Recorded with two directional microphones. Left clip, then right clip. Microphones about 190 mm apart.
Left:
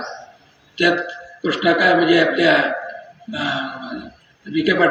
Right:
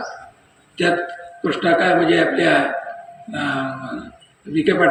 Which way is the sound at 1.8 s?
50° right (ahead or behind).